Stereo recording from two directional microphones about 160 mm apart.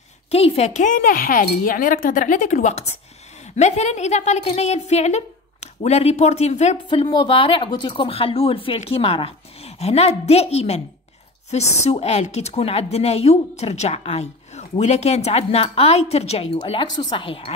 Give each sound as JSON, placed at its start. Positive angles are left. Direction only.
{"t": 0.3, "sound": "a woman's voice", "side_deg": 40}
{"t": 6.9, "sound": "a woman's voice", "side_deg": 30}